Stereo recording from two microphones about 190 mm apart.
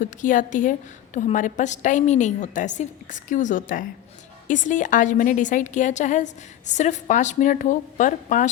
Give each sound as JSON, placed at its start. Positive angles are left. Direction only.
{"t": 0.0, "sound": "a woman's voice", "side_deg": 45}